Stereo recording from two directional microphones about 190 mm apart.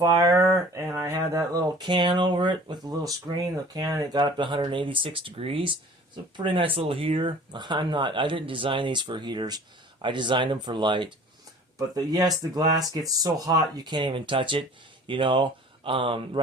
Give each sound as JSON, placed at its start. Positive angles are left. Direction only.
{"t": 0.0, "sound": "speech", "side_deg": -20}